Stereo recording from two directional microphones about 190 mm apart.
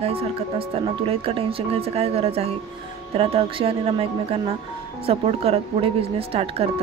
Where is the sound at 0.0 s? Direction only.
30° right (ahead or behind).